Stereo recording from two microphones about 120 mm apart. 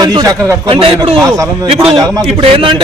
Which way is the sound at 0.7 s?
50° right (ahead or behind).